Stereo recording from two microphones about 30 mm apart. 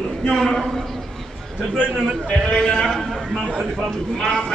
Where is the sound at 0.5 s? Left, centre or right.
Centre.